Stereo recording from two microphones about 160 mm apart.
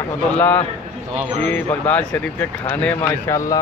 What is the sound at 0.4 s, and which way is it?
Speech, 10° left (ahead or behind).